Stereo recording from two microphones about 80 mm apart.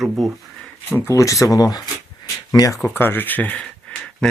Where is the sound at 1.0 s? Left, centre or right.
Left.